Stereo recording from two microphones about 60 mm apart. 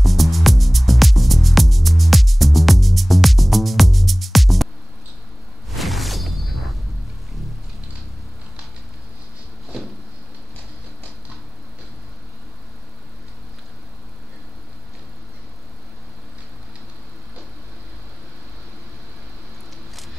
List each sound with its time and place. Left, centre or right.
0.0 s music: centre
5.8 s whoosh: centre